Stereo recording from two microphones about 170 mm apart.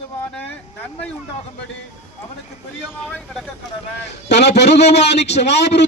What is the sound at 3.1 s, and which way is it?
Speech, 5° left (ahead or behind).